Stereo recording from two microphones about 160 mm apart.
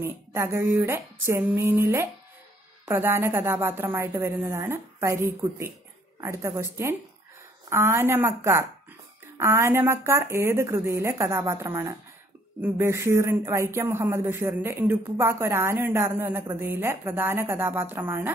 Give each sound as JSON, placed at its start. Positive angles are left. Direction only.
{"t": 0.0, "sound": "speech", "side_deg": -15}